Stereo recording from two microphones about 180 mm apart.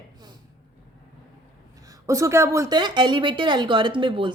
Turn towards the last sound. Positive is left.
turn(degrees=-25)  # may be behind; listen again after turning